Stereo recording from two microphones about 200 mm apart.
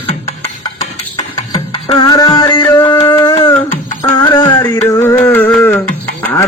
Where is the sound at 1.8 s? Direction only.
20° left (ahead or behind).